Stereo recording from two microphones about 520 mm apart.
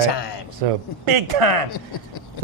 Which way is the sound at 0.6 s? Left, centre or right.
Right.